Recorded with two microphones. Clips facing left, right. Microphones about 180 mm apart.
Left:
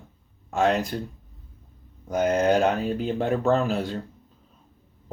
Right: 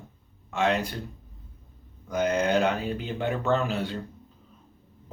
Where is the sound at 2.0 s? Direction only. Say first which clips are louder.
Left 4 dB; 45° left (ahead or behind).